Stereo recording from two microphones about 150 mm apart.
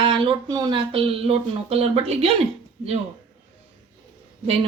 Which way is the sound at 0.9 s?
40° right (ahead or behind).